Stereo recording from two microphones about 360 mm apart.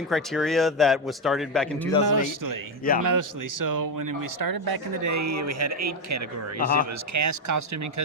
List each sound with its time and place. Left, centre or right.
0.1 s a man's voice: centre
2.0 s speech: right
5.0 s speech: right